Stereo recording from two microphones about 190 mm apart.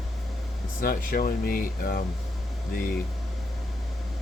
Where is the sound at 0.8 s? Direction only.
50° left (ahead or behind).